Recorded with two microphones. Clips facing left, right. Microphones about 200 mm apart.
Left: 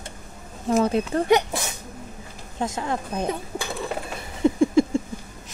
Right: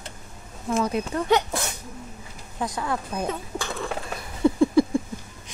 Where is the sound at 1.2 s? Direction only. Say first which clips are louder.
Left 1 dB; 15° left (ahead or behind).